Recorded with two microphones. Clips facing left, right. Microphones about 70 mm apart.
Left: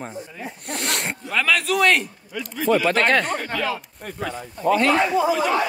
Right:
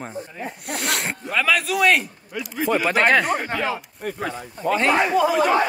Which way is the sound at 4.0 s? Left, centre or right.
Right.